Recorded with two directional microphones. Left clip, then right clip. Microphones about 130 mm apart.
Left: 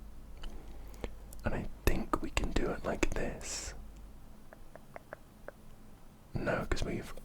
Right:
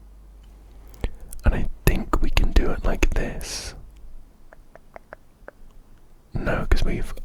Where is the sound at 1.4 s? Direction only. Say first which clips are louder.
Right 9 dB; 35° right (ahead or behind).